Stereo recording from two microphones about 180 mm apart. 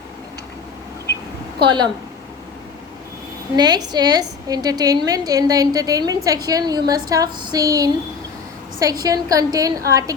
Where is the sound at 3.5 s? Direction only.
20° right (ahead or behind).